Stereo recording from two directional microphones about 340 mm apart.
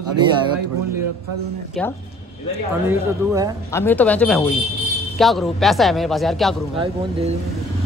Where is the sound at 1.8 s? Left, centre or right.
Centre.